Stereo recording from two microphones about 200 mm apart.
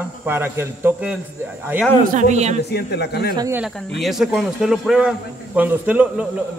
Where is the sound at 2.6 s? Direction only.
55° left (ahead or behind).